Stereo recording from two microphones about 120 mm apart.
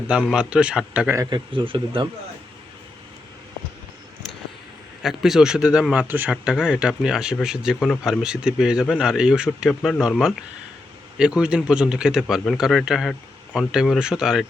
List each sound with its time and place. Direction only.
0.1 s speech: 10° right (ahead or behind)
1.3 s speech: 45° right (ahead or behind)
5.0 s speech: centre (ahead or behind)